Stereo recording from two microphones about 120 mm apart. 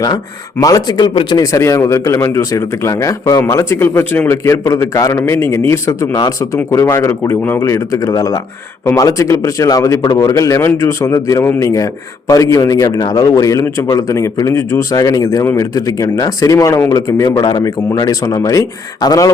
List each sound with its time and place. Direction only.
0.6 s speech: 30° left (ahead or behind)
1.5 s a man's voice: 25° left (ahead or behind)
17.2 s a man's voice: 35° left (ahead or behind)